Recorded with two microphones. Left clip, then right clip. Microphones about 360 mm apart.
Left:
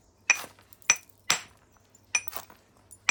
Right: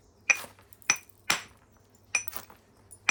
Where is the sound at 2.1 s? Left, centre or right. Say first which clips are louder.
Left 1 dB; centre.